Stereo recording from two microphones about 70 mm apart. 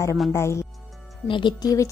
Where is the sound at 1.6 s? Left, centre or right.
Left.